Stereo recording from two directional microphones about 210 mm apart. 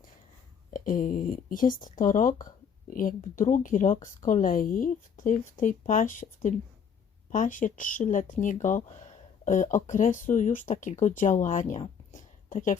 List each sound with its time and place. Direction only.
0.7 s speech: 40° left (ahead or behind)